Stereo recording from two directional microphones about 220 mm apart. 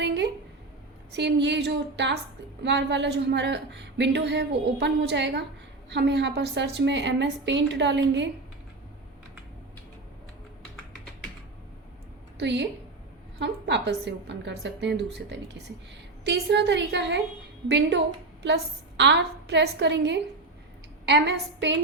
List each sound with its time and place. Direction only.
0.0 s a woman's voice: 50° right (ahead or behind)
12.4 s a woman's voice: 55° right (ahead or behind)